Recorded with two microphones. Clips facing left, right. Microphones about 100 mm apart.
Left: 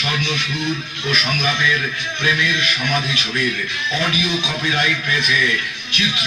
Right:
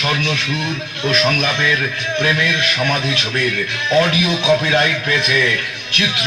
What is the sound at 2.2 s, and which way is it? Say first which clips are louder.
A man's voice: right 1 dB; 50° right (ahead or behind).